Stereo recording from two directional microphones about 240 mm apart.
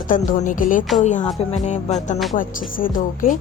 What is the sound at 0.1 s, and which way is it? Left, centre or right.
Speech, left.